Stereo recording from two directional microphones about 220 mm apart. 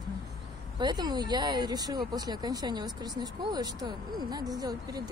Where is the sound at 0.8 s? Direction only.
20° right (ahead or behind).